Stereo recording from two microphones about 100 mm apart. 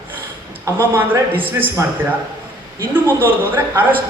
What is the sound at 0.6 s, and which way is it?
A man's voice, 25° right (ahead or behind).